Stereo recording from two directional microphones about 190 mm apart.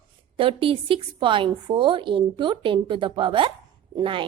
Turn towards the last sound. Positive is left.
turn(degrees=-25)  # may be behind; listen again after turning